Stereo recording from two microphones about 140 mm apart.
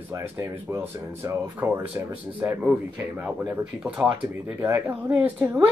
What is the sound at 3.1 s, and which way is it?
Speech, 5° right (ahead or behind).